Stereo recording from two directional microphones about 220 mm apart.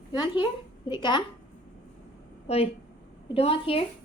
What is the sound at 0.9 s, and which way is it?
Speech, 20° left (ahead or behind).